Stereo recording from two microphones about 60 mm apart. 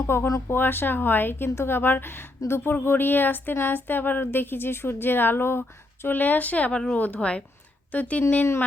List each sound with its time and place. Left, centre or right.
0.1 s a woman's voice: left